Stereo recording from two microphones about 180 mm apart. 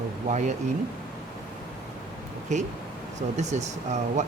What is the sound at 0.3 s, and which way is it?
Speech, 40° right (ahead or behind).